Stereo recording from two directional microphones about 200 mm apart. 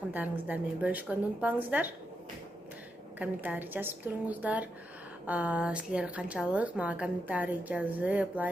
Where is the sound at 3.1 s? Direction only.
10° right (ahead or behind).